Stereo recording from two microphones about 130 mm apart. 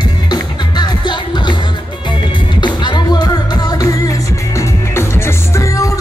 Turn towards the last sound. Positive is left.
turn(degrees=25)  # may be behind; listen again after turning